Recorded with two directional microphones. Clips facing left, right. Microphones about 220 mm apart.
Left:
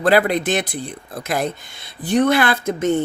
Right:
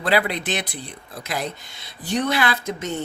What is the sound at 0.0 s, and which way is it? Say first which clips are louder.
Speech: left 6 dB; 50° left (ahead or behind).